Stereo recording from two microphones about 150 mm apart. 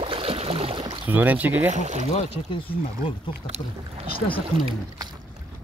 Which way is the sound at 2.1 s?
40° left (ahead or behind).